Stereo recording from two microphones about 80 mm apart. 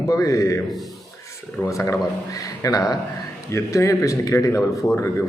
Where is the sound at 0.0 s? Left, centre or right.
Left.